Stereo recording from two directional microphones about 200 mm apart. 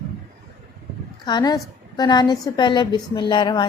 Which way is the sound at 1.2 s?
20° left (ahead or behind).